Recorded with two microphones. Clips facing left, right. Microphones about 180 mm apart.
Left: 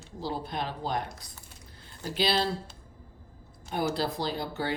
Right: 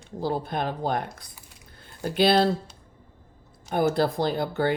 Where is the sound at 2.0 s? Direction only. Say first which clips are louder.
Right 8 dB; 55° right (ahead or behind).